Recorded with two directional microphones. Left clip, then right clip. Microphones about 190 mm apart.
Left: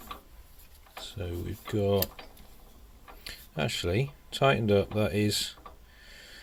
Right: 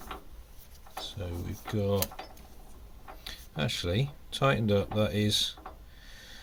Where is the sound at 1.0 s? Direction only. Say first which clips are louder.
Left 4 dB; 40° left (ahead or behind).